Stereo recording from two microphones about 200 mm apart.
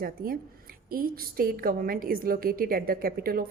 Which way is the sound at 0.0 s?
45° right (ahead or behind).